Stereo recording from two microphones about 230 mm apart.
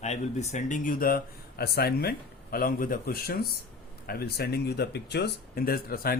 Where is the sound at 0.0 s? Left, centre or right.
Left.